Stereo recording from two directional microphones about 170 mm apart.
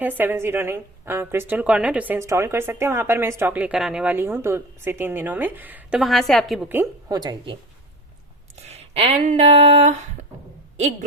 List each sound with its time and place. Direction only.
0.2 s a woman's voice: 15° right (ahead or behind)
6.7 s a woman's voice: 15° right (ahead or behind)
7.2 s speech: 25° right (ahead or behind)
8.6 s speech: 40° right (ahead or behind)